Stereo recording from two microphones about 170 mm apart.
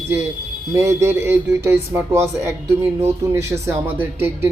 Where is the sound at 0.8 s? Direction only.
15° right (ahead or behind).